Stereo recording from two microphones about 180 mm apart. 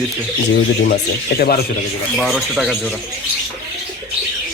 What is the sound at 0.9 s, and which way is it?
Speech, 55° left (ahead or behind).